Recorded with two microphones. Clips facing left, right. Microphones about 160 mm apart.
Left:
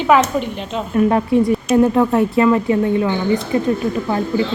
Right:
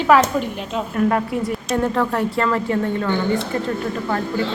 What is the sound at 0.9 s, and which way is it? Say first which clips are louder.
Speech: left 6 dB; 20° left (ahead or behind).